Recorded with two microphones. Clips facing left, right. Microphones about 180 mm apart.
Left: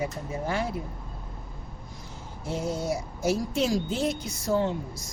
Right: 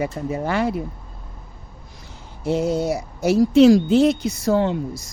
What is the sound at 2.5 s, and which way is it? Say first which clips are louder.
Speech: right 9 dB; 70° right (ahead or behind).